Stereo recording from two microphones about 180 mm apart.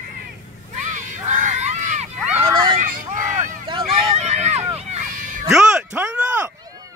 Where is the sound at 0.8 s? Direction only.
45° right (ahead or behind).